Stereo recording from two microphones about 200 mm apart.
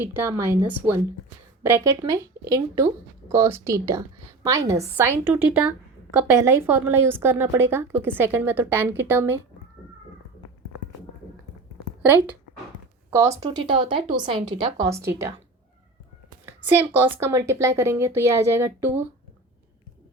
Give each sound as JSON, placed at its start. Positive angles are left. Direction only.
{"t": 0.0, "sound": "a woman's voice", "side_deg": -10}
{"t": 12.0, "sound": "a woman's voice", "side_deg": -10}
{"t": 16.5, "sound": "a woman's voice", "side_deg": -10}